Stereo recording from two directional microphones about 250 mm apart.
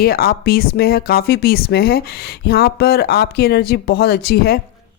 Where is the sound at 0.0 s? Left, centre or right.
Left.